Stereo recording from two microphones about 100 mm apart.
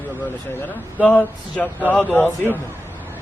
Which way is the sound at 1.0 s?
15° left (ahead or behind).